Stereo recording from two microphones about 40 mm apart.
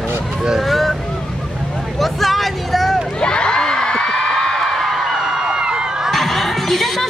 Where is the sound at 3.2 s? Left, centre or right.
Left; by 5.2 s centre.